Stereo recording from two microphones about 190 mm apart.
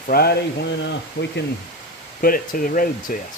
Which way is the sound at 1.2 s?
65° left (ahead or behind).